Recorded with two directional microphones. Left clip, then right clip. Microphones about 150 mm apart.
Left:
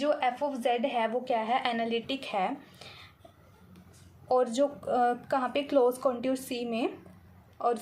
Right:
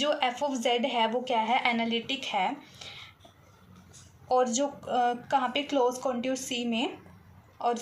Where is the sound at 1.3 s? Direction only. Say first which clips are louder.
Right 2 dB; 30° left (ahead or behind); by 2.8 s 50° left (ahead or behind).